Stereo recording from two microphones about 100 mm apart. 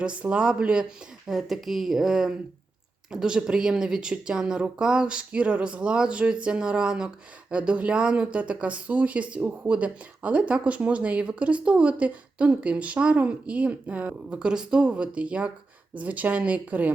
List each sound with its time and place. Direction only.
0.2 s speech: 10° right (ahead or behind)